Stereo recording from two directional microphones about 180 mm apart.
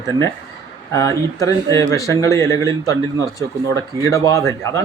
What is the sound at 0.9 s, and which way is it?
A man's voice, 15° left (ahead or behind).